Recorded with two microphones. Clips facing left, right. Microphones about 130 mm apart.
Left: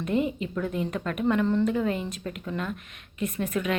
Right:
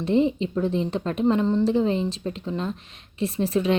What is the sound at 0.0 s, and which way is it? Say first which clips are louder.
A woman's voice: right 5 dB; 30° right (ahead or behind).